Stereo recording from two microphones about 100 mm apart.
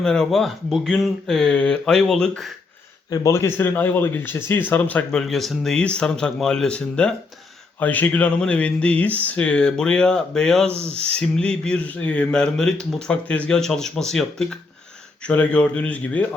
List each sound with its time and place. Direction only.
0.0 s speech: 5° left (ahead or behind)
3.1 s speech: 30° left (ahead or behind)
5.2 s speech: centre (ahead or behind)